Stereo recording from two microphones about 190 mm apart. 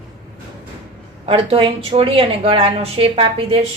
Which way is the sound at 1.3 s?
30° right (ahead or behind).